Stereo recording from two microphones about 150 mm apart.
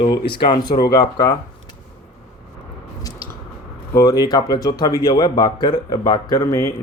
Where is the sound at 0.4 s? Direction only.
30° left (ahead or behind).